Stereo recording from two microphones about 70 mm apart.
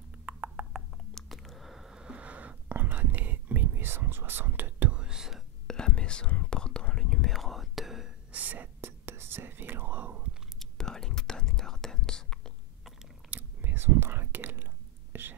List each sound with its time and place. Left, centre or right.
0.2 s a sound: right
1.1 s whispering: centre; by 5.0 s right
5.0 s whispering: centre
5.7 s whispering: centre
8.3 s whispering: right
10.6 s whispering: centre
13.3 s whispering: right